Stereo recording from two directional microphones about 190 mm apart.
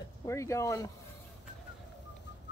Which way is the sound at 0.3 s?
15° left (ahead or behind).